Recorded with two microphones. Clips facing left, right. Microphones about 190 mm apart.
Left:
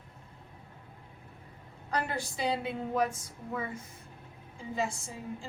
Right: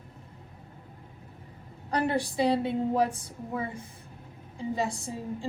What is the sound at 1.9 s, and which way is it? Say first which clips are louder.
A woman's voice: right 6 dB; 30° right (ahead or behind).